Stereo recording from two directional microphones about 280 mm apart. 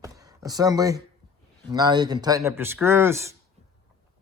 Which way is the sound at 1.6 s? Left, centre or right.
Centre.